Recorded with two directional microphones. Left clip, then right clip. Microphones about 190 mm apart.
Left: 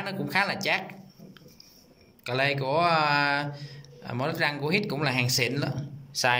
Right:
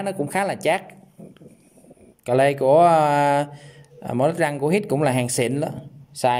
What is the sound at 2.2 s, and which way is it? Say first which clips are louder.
Speech: right 10 dB; 35° right (ahead or behind).